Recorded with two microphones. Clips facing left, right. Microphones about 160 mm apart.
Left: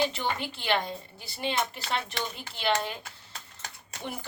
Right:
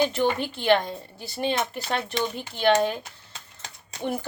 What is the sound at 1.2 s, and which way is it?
A woman's voice, 45° right (ahead or behind).